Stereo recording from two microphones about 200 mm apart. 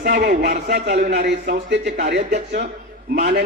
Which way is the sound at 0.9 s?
35° right (ahead or behind).